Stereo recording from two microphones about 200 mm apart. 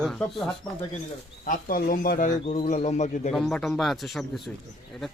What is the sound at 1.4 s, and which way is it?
Speech, 45° left (ahead or behind).